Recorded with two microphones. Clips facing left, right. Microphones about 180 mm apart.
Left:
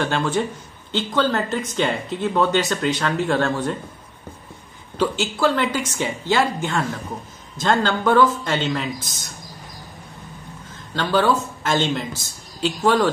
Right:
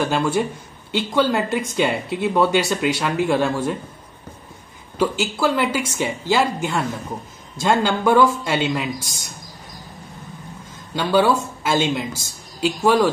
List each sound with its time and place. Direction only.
0.0 s a woman's voice: 10° right (ahead or behind)
4.9 s a woman's voice: 10° right (ahead or behind)
11.0 s a woman's voice: 10° right (ahead or behind)